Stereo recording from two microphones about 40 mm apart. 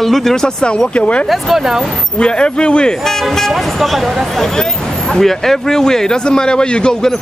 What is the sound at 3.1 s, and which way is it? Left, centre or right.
Speech, centre.